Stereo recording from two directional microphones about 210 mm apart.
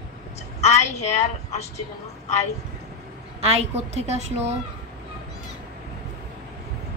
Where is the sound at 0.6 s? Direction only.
30° left (ahead or behind).